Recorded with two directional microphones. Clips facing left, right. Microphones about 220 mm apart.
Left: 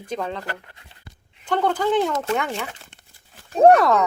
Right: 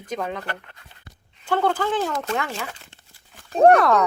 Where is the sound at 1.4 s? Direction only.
5° right (ahead or behind).